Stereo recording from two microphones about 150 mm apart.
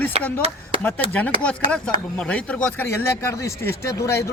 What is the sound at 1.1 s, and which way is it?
Speech, 10° left (ahead or behind).